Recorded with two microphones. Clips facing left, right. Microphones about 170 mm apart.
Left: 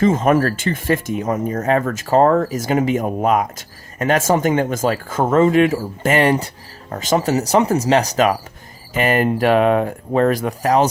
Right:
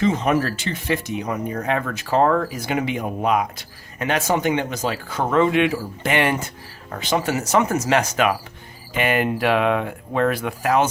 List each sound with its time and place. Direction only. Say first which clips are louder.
0.0 s speech: left 5 dB; 45° left (ahead or behind)